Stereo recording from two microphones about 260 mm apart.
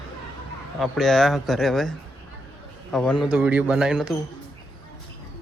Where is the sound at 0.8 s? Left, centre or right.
Centre.